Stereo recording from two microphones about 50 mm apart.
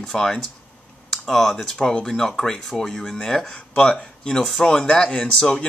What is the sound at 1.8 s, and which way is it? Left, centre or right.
Speech, centre.